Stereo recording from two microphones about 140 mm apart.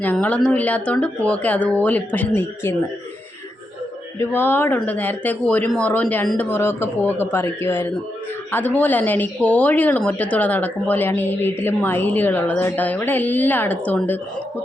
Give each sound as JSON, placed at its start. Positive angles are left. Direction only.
{"t": 0.0, "sound": "speech", "side_deg": 10}
{"t": 4.2, "sound": "speech", "side_deg": 15}